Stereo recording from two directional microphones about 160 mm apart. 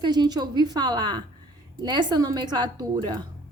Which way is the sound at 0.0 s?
25° right (ahead or behind).